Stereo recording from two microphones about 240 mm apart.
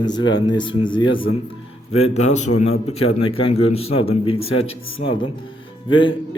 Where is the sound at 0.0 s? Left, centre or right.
Centre.